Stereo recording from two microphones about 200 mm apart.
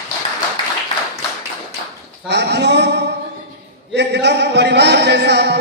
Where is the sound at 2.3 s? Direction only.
60° right (ahead or behind).